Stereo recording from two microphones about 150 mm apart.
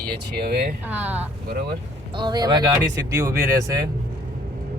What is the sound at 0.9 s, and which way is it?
Speech, 10° right (ahead or behind).